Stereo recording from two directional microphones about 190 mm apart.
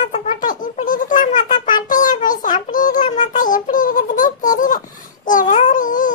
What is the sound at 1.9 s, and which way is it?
Child singing, 45° left (ahead or behind).